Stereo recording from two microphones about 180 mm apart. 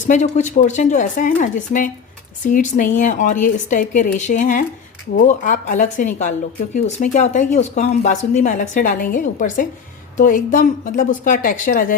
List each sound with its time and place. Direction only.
0.1 s speech: 40° left (ahead or behind)